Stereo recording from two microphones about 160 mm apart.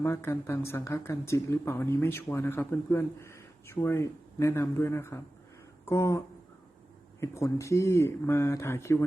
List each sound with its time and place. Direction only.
0.0 s speech: 15° left (ahead or behind)